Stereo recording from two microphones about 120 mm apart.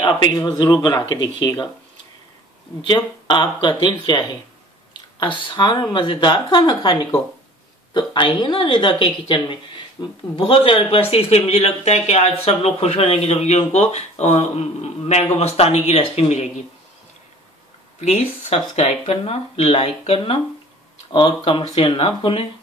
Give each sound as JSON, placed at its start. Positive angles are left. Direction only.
{"t": 0.2, "sound": "speech", "side_deg": 35}
{"t": 2.9, "sound": "speech", "side_deg": 40}
{"t": 5.2, "sound": "speech", "side_deg": 40}
{"t": 18.0, "sound": "speech", "side_deg": 60}
{"t": 21.1, "sound": "speech", "side_deg": 45}